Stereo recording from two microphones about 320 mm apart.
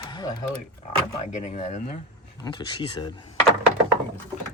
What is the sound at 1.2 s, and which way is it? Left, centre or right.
Speech, left.